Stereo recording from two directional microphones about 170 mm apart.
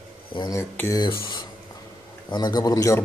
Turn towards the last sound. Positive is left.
turn(degrees=20)  # may be behind; listen again after turning